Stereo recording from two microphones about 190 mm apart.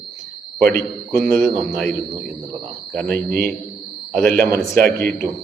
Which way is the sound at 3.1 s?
50° right (ahead or behind).